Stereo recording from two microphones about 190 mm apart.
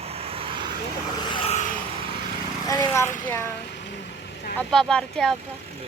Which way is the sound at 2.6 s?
20° left (ahead or behind).